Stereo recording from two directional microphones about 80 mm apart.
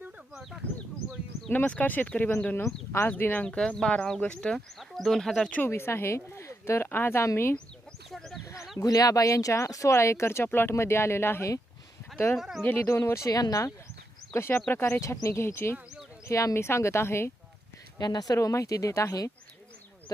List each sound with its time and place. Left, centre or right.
1.5 s speech: left
2.6 s speech: left; by 5.5 s centre
5.6 s speech: left
8.1 s a sound: centre
8.8 s speech: left
12.4 s speech: centre
12.8 s speech: left
13.2 s speech: left
14.3 s speech: left
16.2 s speech: left
18.0 s speech: left